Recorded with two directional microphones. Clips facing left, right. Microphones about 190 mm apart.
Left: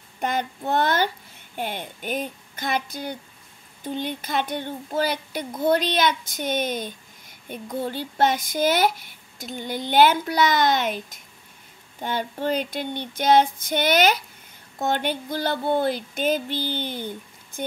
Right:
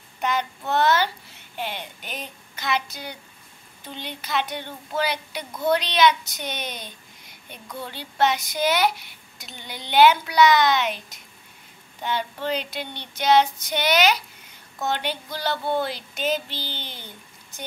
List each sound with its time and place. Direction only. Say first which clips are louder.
0.2 s speech: even; 50° left (ahead or behind)